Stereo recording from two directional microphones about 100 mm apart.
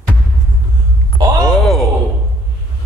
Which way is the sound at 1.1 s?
40° right (ahead or behind).